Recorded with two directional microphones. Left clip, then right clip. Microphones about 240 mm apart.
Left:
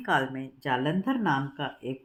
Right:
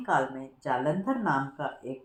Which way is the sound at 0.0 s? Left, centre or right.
Left.